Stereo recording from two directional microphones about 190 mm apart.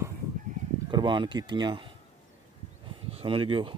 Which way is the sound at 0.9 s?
25° right (ahead or behind).